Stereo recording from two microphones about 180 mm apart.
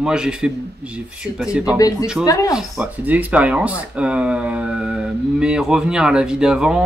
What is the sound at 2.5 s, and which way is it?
Speech, 5° right (ahead or behind).